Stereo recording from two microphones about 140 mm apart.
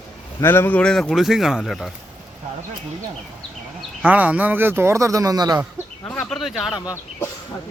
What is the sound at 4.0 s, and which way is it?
Speech, 10° right (ahead or behind).